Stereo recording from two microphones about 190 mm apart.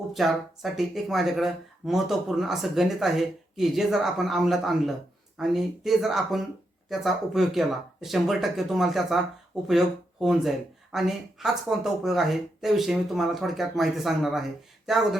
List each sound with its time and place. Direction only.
0.1 s speech: centre (ahead or behind)